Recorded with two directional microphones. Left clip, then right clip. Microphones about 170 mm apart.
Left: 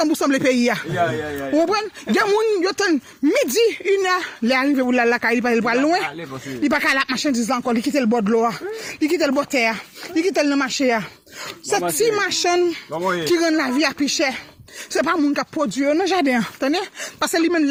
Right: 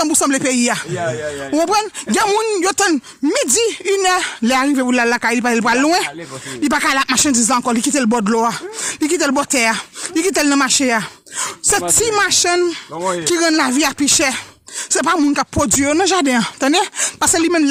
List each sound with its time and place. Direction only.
0.0 s speech: 15° right (ahead or behind)
2.6 s speech: 30° right (ahead or behind)
16.0 s speech: 20° right (ahead or behind)
17.2 s speech: 20° right (ahead or behind)